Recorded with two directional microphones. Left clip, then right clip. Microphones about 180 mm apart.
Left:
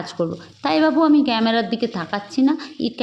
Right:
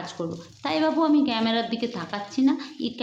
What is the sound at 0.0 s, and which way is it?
A woman's voice, 40° left (ahead or behind).